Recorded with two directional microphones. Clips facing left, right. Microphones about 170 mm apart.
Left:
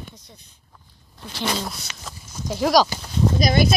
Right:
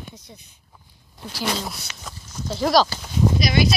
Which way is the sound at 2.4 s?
10° left (ahead or behind).